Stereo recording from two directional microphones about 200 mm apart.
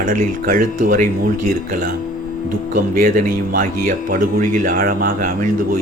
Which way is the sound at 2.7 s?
40° right (ahead or behind).